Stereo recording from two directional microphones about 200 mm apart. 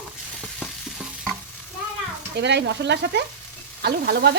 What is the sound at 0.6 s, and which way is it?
Stir, centre (ahead or behind).